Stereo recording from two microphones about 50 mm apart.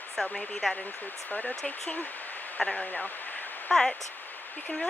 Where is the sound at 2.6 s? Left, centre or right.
Centre.